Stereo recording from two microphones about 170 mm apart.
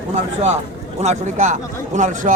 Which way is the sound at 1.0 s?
45° right (ahead or behind).